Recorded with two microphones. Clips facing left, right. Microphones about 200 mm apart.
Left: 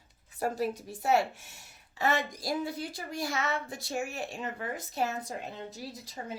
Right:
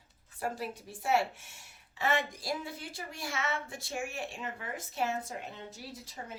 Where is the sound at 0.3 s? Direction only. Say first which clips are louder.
Left 6 dB; 40° left (ahead or behind).